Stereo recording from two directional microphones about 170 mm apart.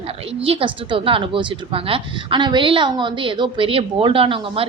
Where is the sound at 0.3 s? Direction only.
35° right (ahead or behind).